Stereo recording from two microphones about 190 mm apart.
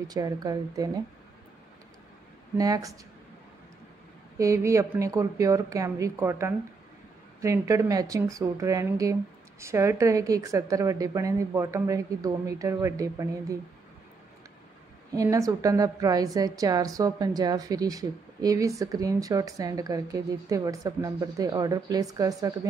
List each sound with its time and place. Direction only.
0.1 s a woman's voice: 20° right (ahead or behind)
2.5 s a woman's voice: 20° right (ahead or behind)
4.4 s a woman's voice: 15° right (ahead or behind)
15.1 s a woman's voice: 15° right (ahead or behind)